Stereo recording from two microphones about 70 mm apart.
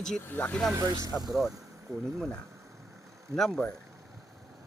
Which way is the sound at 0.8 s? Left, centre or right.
Right.